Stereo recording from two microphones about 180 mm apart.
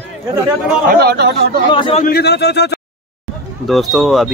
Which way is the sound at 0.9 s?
60° right (ahead or behind).